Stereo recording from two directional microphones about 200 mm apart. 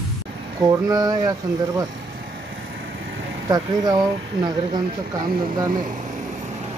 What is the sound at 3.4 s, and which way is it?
Speech, 20° right (ahead or behind).